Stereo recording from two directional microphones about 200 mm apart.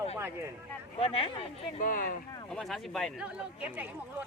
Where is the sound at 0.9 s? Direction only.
30° left (ahead or behind).